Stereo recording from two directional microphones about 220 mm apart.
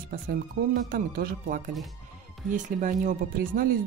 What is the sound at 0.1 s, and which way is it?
Speech, 40° right (ahead or behind).